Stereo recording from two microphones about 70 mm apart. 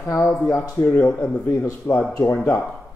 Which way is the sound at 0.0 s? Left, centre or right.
Left.